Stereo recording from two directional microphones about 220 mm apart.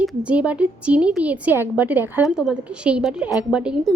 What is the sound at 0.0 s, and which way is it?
A woman's voice, 5° right (ahead or behind).